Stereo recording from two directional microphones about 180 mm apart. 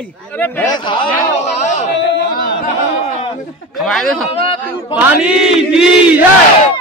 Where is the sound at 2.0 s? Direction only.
80° left; by 2.5 s 60° left (ahead or behind).